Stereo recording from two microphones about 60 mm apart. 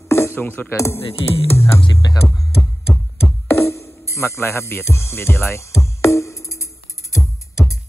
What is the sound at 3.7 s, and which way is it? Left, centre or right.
Music, left.